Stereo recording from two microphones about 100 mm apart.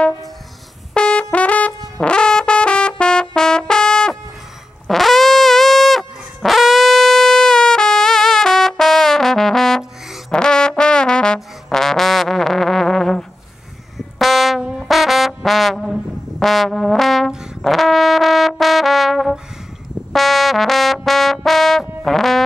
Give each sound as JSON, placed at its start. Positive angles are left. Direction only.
{"t": 0.9, "sound": "brass instrument", "side_deg": 10}
{"t": 2.0, "sound": "music", "side_deg": 10}
{"t": 4.8, "sound": "brass instrument", "side_deg": 0}
{"t": 20.1, "sound": "music", "side_deg": 0}